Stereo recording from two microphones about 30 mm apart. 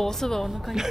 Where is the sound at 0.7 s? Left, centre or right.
Centre.